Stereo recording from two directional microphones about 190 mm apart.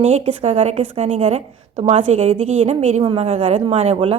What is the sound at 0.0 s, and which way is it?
Speech, 35° right (ahead or behind).